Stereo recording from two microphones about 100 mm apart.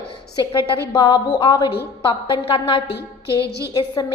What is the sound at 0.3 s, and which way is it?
A woman's voice, 55° left (ahead or behind).